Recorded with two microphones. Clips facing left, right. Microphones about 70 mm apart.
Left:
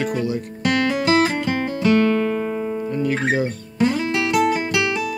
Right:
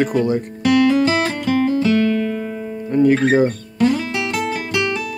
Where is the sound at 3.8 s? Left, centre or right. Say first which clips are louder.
Right 1 dB; centre.